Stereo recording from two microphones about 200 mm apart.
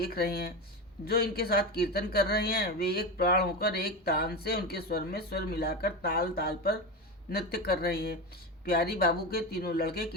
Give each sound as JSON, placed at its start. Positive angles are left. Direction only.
{"t": 0.0, "sound": "speech", "side_deg": 50}